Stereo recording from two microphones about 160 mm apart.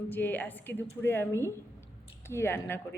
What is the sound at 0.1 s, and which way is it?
A woman's voice, 10° left (ahead or behind).